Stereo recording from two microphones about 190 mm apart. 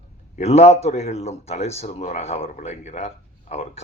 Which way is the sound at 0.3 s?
35° left (ahead or behind).